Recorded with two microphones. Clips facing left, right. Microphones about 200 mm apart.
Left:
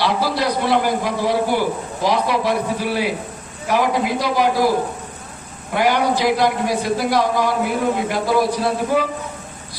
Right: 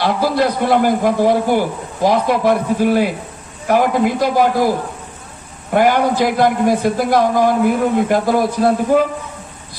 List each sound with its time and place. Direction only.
0.0 s a man's voice: 50° right (ahead or behind)
5.8 s a man's voice: 50° right (ahead or behind)